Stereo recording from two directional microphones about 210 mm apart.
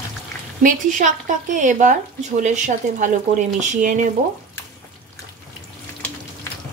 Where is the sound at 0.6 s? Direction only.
40° right (ahead or behind).